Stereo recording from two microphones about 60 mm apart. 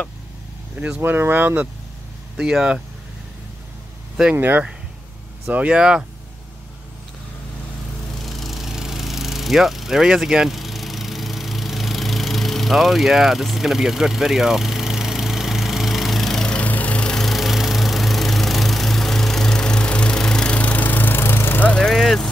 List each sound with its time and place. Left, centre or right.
0.7 s speech: right
1.0 s speech: right
2.3 s speech: centre
4.3 s speech: right
5.8 s speech: centre
8.2 s a sound: centre
16.5 s music: left
17.1 s lawn mower: centre; by 21.6 s left
21.8 s vehicle: centre